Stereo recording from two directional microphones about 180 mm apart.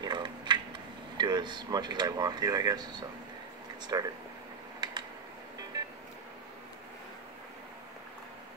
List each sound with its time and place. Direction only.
0.0 s a sound: 25° right (ahead or behind)
1.1 s speech: 25° right (ahead or behind)
4.7 s typing: 25° right (ahead or behind)